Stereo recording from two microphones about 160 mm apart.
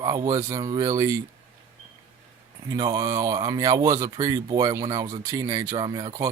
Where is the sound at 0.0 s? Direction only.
25° right (ahead or behind).